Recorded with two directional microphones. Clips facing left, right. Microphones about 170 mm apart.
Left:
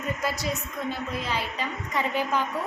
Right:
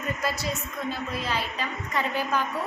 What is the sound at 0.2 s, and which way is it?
A woman's voice, 15° left (ahead or behind).